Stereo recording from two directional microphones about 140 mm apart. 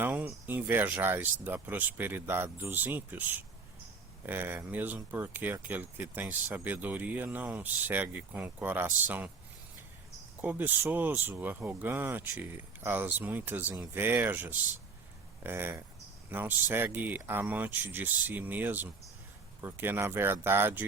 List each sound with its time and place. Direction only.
0.0 s speech: 10° right (ahead or behind)
10.4 s speech: 10° right (ahead or behind)